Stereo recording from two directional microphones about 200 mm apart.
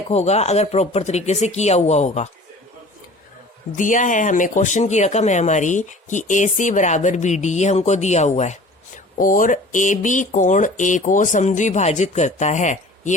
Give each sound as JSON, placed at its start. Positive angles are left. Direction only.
{"t": 0.1, "sound": "speech", "side_deg": 35}
{"t": 3.8, "sound": "speech", "side_deg": 40}